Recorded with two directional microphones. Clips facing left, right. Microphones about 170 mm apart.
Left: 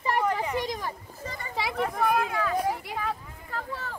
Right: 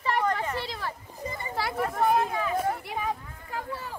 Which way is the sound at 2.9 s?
15° right (ahead or behind).